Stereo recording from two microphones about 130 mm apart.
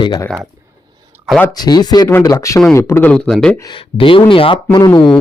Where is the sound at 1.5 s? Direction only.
30° left (ahead or behind); by 3.5 s 5° left (ahead or behind).